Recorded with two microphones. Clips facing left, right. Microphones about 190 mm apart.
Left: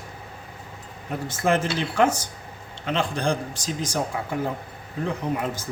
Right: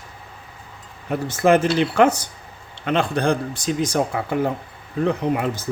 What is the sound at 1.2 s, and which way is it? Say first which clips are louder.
A man's voice: right 7 dB; 70° right (ahead or behind).